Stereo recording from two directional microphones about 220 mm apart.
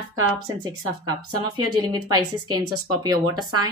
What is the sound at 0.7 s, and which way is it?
A woman's voice, 20° right (ahead or behind).